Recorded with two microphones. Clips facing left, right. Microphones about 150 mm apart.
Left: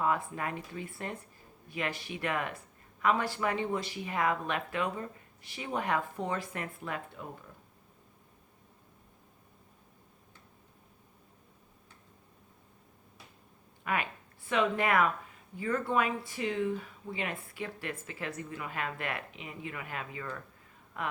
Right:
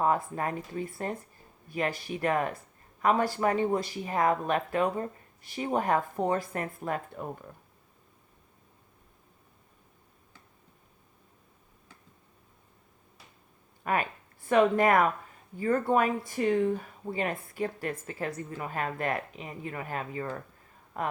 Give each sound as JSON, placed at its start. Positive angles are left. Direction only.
{"t": 0.0, "sound": "speech", "side_deg": -40}
{"t": 13.8, "sound": "speech", "side_deg": -40}